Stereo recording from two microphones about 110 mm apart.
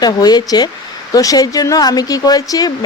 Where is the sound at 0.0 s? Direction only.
40° left (ahead or behind).